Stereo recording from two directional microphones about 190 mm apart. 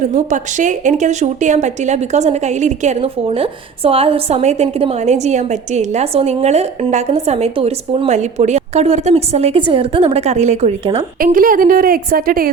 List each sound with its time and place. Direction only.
0.1 s a woman's voice: 40° right (ahead or behind)
11.2 s a woman's voice: 45° right (ahead or behind)